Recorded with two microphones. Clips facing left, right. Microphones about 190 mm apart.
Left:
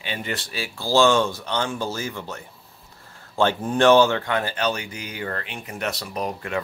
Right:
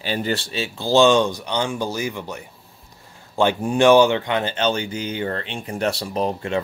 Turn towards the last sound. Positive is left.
turn(degrees=-25)  # may be behind; listen again after turning